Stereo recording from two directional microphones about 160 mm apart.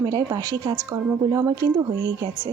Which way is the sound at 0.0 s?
20° right (ahead or behind).